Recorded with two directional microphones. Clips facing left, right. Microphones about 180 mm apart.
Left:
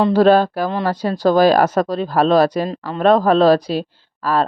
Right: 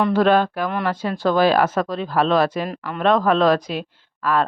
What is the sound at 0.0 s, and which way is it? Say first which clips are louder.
Speech: left 4 dB; 35° left (ahead or behind).